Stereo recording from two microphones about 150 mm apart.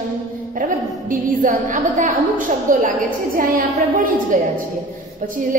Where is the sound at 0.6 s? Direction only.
60° right (ahead or behind).